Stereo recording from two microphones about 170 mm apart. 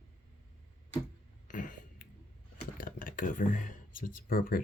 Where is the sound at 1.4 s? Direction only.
50° left (ahead or behind).